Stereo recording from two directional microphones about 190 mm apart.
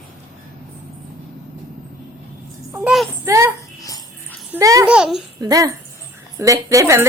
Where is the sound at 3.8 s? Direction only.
20° left (ahead or behind).